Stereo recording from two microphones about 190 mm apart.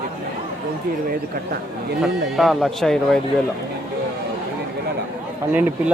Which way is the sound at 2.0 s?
Centre (ahead or behind).